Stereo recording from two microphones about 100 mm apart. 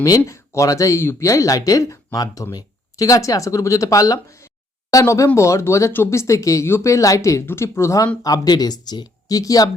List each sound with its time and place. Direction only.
0.3 s speech: 30° left (ahead or behind)
8.2 s speech: 40° left (ahead or behind)